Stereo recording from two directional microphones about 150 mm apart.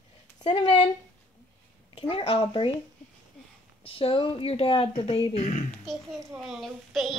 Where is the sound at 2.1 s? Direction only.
40° left (ahead or behind).